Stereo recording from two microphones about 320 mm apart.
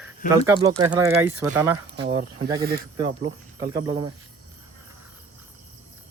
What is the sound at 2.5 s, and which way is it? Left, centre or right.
Speech, right.